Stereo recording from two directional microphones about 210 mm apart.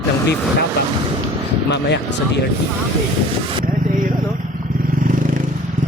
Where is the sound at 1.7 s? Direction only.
55° left (ahead or behind).